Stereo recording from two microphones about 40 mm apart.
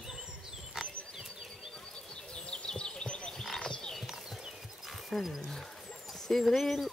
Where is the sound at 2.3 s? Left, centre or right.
Left.